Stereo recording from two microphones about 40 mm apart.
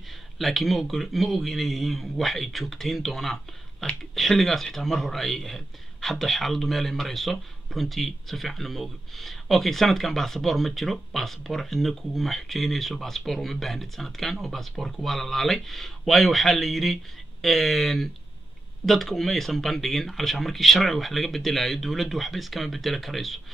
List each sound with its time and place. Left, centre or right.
0.4 s a man's voice: centre